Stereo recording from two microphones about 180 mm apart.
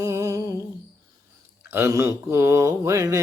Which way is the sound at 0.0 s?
15° right (ahead or behind).